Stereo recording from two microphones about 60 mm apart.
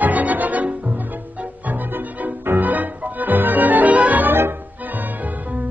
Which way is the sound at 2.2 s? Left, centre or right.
Right.